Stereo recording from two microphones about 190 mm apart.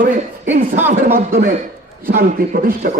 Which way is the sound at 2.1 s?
50° right (ahead or behind).